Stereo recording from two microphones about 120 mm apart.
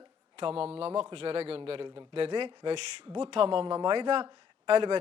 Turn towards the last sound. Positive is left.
turn(degrees=-50)  # may be behind; listen again after turning